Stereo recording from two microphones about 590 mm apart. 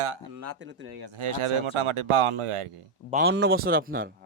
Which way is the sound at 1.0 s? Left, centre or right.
Right.